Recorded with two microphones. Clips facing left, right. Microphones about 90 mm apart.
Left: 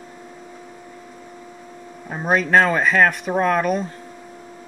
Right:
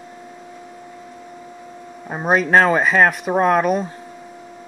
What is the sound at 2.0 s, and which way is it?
Speech, 20° right (ahead or behind).